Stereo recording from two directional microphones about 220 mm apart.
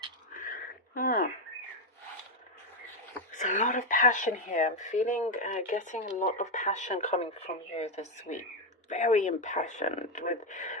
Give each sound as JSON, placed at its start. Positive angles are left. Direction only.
{"t": 0.9, "sound": "speech", "side_deg": 40}
{"t": 3.3, "sound": "speech", "side_deg": 35}